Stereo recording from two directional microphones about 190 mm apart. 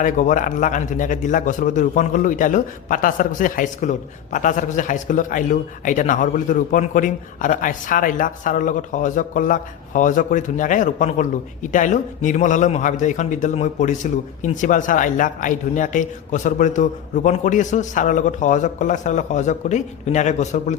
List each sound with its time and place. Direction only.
0.0 s a man's voice: 45° left (ahead or behind)